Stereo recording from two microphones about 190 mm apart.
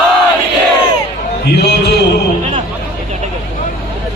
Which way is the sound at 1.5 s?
60° left (ahead or behind).